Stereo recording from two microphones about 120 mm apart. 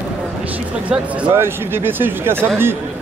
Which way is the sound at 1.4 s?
20° right (ahead or behind).